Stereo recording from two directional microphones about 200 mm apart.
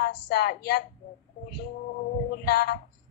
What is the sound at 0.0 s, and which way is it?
Speech, 50° left (ahead or behind).